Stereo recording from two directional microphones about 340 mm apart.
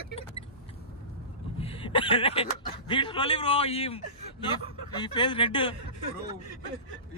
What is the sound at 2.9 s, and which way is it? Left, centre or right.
A man's voice, centre.